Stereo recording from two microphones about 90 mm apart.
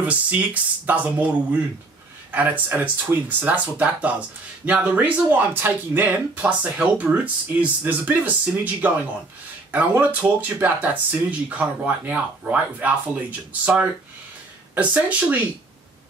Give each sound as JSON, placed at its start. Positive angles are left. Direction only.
{"t": 0.0, "sound": "speech", "side_deg": -15}